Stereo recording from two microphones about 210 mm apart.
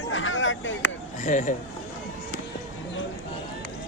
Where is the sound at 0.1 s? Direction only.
65° left (ahead or behind).